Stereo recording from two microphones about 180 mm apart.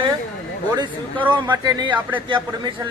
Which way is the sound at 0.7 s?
25° right (ahead or behind).